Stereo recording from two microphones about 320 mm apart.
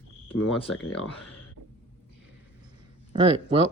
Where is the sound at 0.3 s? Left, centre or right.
Left.